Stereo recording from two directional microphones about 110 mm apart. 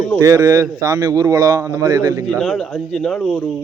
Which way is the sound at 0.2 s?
30° right (ahead or behind).